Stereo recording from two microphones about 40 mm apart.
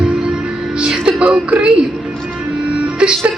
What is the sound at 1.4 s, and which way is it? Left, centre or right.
Speech, right.